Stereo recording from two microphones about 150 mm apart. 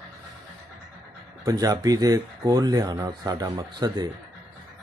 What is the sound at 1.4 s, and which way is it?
Speech, 25° right (ahead or behind).